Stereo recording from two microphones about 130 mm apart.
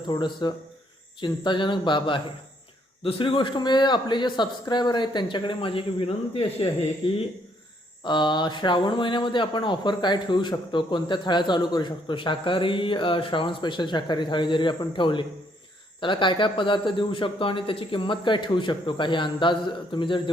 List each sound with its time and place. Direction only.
0.1 s speech: 35° left (ahead or behind)
8.0 s speech: 35° left (ahead or behind)